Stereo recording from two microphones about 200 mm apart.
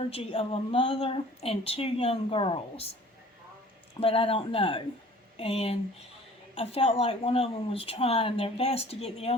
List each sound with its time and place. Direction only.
0.1 s a woman's voice: 25° left (ahead or behind)
4.0 s a woman's voice: 25° left (ahead or behind)